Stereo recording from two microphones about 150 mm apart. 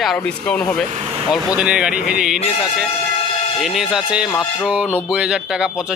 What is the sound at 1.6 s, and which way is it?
Speech, 5° right (ahead or behind).